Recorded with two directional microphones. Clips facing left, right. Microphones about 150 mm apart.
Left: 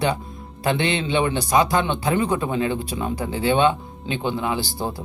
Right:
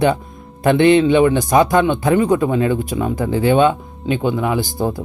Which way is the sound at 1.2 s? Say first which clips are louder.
Right 6 dB; 50° right (ahead or behind).